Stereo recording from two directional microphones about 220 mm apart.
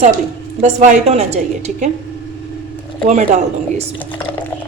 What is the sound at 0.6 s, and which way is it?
A woman's voice, 30° right (ahead or behind).